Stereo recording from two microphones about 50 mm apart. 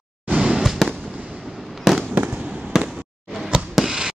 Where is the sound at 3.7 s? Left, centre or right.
Centre.